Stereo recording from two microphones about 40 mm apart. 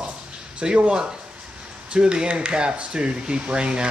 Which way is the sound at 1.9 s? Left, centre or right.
Right.